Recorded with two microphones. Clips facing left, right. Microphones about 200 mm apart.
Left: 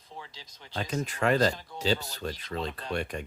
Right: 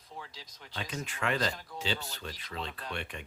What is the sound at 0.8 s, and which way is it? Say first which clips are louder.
Speech: left 7 dB; 40° left (ahead or behind).